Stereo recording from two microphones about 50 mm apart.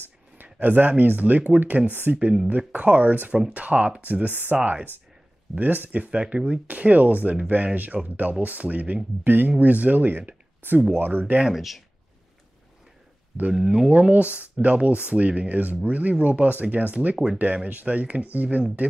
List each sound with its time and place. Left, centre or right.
0.0 s speech: right
2.5 s speech: right
11.5 s speech: centre
13.5 s speech: centre
13.8 s speech: right